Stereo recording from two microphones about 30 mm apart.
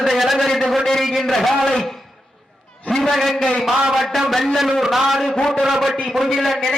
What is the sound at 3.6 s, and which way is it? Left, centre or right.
A man's voice, centre.